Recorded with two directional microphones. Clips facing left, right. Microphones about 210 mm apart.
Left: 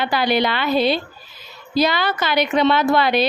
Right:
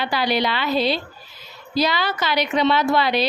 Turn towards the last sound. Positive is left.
turn(degrees=50)  # may be behind; listen again after turning